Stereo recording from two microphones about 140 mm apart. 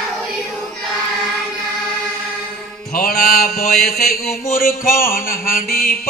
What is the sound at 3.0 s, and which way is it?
Music, 90° left.